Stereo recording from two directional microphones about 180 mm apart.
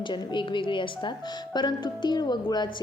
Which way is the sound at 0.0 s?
25° left (ahead or behind).